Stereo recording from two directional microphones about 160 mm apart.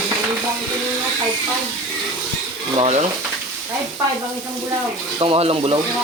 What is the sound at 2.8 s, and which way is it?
Speech, 40° right (ahead or behind).